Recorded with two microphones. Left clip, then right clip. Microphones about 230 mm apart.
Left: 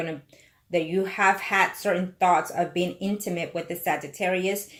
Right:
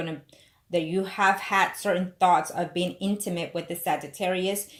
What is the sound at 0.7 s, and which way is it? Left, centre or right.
Speech, right.